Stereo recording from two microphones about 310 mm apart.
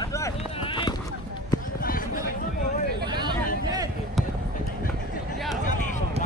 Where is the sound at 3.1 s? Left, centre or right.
Centre.